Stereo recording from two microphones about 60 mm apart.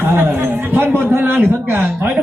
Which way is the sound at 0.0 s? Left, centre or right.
Right.